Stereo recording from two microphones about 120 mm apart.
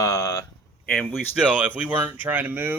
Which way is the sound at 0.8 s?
5° left (ahead or behind).